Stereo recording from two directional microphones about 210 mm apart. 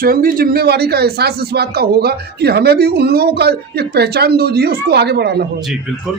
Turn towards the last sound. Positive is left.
turn(degrees=-50)  # may be behind; listen again after turning